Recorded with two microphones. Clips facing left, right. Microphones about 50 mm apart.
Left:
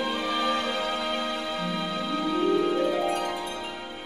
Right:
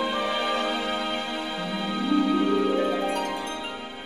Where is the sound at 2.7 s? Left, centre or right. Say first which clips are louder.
Even; centre.